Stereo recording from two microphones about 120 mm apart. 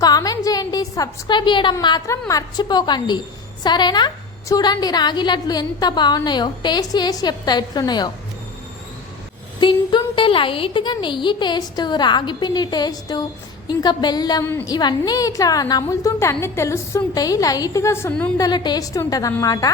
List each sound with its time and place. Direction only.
0.0 s a sound: 30° left (ahead or behind)
2.0 s a woman's voice: 25° left (ahead or behind)
9.6 s a woman's voice: 40° left (ahead or behind); by 18.1 s 20° left (ahead or behind)
18.1 s a woman's voice: 10° left (ahead or behind)
18.3 s a woman's voice: 35° left (ahead or behind)